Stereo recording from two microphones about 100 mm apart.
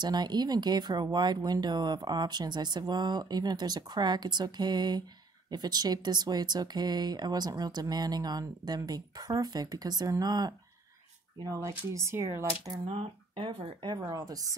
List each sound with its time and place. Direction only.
0.0 s speech: 45° right (ahead or behind)
12.8 s speech: 75° right (ahead or behind)
13.8 s speech: 45° right (ahead or behind)